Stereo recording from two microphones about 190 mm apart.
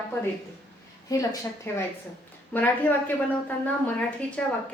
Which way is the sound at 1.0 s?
20° left (ahead or behind).